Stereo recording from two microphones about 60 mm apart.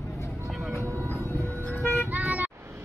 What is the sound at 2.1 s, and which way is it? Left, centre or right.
Vehicle, right.